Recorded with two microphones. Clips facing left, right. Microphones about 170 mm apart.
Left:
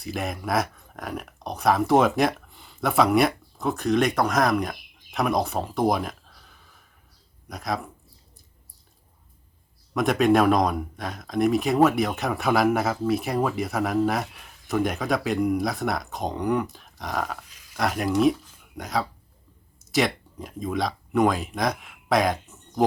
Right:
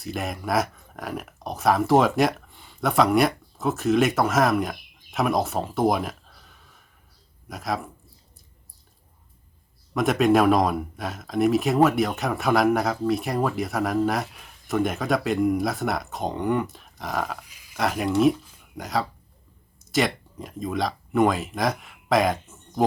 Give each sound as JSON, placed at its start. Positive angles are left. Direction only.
{"t": 0.0, "sound": "speech", "side_deg": 0}
{"t": 9.9, "sound": "speech", "side_deg": 0}